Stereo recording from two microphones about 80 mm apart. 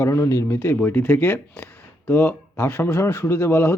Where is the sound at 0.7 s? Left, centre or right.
Left.